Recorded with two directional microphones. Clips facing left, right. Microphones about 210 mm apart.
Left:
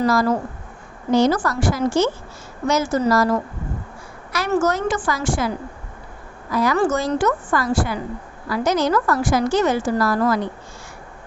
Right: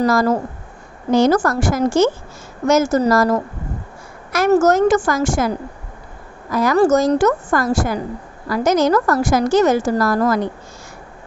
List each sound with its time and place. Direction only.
0.0 s a woman's voice: 45° right (ahead or behind)
6.5 s a woman's voice: 45° right (ahead or behind)